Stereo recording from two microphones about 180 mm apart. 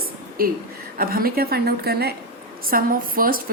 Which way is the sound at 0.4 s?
55° right (ahead or behind).